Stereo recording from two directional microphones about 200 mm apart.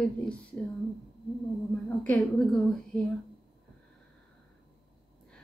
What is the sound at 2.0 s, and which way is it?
Speech, 5° left (ahead or behind).